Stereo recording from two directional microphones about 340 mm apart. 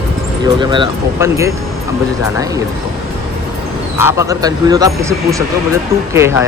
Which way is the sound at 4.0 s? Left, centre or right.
Centre.